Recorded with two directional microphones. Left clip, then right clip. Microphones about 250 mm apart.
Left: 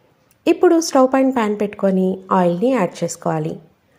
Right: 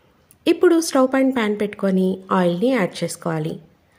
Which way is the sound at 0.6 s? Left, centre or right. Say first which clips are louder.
Left 3 dB; centre.